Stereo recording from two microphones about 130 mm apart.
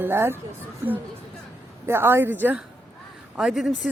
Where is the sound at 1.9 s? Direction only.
20° right (ahead or behind).